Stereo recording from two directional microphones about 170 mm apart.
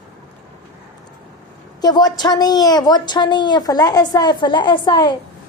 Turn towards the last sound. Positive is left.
turn(degrees=25)  # may be behind; listen again after turning